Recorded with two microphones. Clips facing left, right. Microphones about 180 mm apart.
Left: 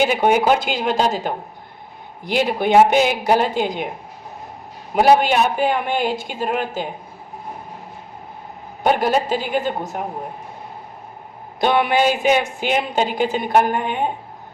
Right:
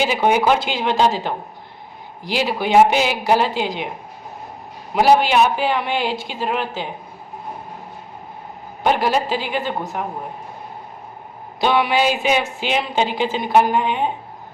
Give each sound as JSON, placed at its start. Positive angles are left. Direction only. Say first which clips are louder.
{"t": 0.0, "sound": "a woman's voice", "louder": "left 1 dB", "side_deg": 50}
{"t": 4.9, "sound": "a woman's voice", "louder": "even", "side_deg": 50}
{"t": 8.8, "sound": "a woman's voice", "louder": "left 1 dB", "side_deg": 50}
{"t": 11.6, "sound": "a woman's voice", "louder": "left 1 dB", "side_deg": 50}